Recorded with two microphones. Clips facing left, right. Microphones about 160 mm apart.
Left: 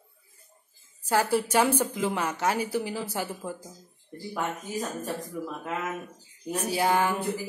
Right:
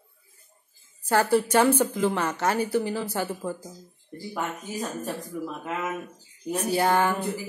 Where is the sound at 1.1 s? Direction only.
5° left (ahead or behind).